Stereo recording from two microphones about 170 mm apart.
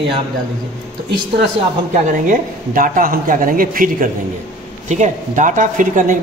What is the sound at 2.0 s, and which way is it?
Speech, 50° right (ahead or behind).